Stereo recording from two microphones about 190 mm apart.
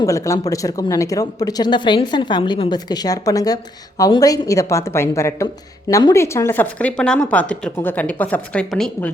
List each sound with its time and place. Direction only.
0.0 s speech: 15° left (ahead or behind)